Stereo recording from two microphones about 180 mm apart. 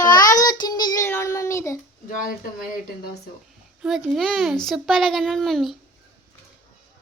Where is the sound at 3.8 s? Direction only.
Centre (ahead or behind).